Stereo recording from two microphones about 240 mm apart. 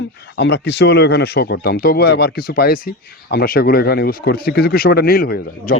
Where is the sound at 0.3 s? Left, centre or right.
Left.